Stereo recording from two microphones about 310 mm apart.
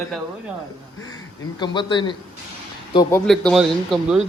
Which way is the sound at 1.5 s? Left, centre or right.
Centre.